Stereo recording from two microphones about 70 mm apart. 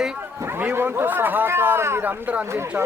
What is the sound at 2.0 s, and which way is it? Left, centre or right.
Speech, right.